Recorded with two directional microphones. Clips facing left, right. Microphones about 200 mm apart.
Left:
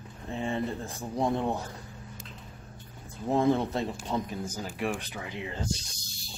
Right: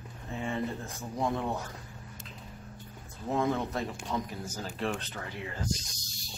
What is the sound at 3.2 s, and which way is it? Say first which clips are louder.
Speech: left 5 dB; 30° left (ahead or behind).